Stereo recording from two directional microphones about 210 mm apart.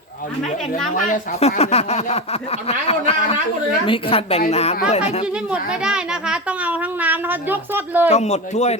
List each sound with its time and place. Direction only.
0.9 s speech: 40° left (ahead or behind)
5.2 s a child's voice: 5° right (ahead or behind)
8.1 s speech: 30° left (ahead or behind)